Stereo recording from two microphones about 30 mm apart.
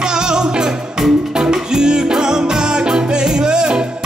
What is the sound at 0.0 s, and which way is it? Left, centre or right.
Music, right.